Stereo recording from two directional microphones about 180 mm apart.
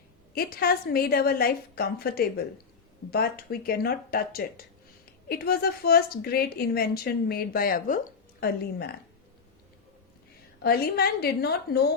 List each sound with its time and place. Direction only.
0.3 s a woman's voice: 55° left (ahead or behind)
10.6 s a woman's voice: 60° left (ahead or behind)